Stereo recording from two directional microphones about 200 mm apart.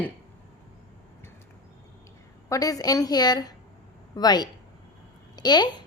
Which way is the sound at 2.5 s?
15° left (ahead or behind).